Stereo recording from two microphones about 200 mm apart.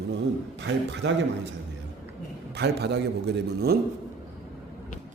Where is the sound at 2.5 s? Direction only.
55° right (ahead or behind).